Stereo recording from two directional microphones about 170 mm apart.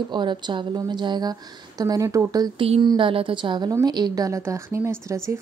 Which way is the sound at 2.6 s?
35° right (ahead or behind).